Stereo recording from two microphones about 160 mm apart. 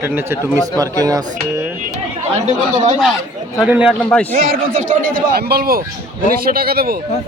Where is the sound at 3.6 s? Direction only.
10° right (ahead or behind).